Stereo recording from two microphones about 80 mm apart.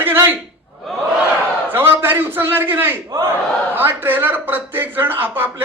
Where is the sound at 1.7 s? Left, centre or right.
Right.